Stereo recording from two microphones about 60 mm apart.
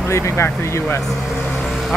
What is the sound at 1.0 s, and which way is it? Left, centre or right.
Speech, centre.